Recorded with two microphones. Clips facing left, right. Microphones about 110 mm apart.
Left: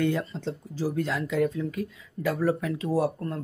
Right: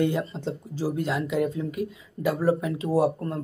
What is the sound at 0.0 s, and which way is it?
Speech, 15° right (ahead or behind).